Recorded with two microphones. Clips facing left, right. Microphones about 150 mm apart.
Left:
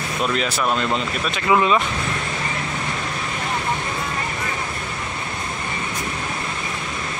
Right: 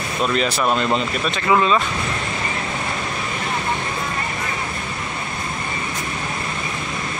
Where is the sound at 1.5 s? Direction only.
15° left (ahead or behind).